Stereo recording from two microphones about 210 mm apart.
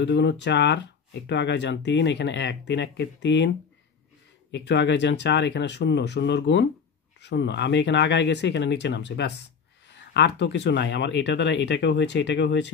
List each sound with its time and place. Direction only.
0.0 s speech: 55° left (ahead or behind)